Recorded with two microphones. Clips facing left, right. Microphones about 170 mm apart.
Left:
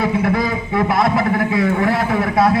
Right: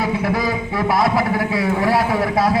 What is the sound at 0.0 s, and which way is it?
A man's voice, 55° left (ahead or behind).